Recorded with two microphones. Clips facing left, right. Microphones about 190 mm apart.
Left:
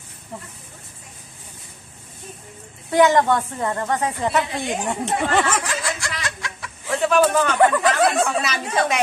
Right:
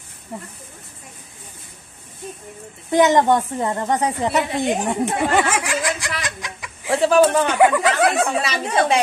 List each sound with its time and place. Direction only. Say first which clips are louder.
2.9 s a woman's voice: right 1 dB; 20° right (ahead or behind)
6.9 s a sound: right 3 dB; 30° right (ahead or behind)
7.4 s a woman's voice: right 1 dB; 10° right (ahead or behind)
8.4 s speech: right 2 dB; 30° right (ahead or behind)